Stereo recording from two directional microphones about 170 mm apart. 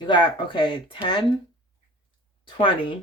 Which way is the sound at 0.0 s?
30° left (ahead or behind).